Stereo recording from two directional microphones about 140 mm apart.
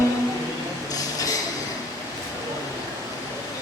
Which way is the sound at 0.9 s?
25° left (ahead or behind).